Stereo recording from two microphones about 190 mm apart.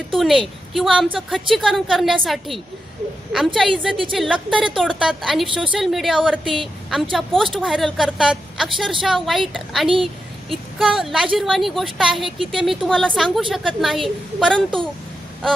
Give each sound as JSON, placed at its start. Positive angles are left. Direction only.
{"t": 0.2, "sound": "a woman's voice", "side_deg": 0}